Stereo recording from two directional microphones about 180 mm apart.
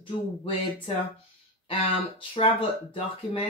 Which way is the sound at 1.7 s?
30° left (ahead or behind).